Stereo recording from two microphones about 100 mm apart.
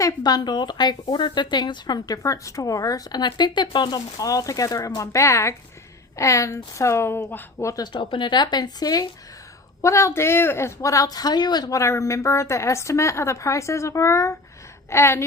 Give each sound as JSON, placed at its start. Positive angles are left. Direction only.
{"t": 0.2, "sound": "a woman's voice", "side_deg": 45}
{"t": 7.6, "sound": "speech", "side_deg": 30}
{"t": 7.9, "sound": "speech", "side_deg": 50}
{"t": 9.8, "sound": "speech", "side_deg": 30}
{"t": 11.8, "sound": "a woman's voice", "side_deg": 30}